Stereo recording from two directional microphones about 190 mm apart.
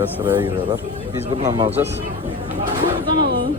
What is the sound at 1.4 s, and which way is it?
Speech, 15° right (ahead or behind).